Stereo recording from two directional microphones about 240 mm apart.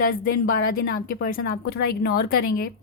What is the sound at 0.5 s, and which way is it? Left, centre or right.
A woman's voice, left.